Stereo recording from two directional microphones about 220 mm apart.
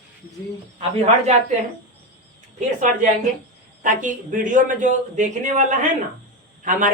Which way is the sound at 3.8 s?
35° right (ahead or behind).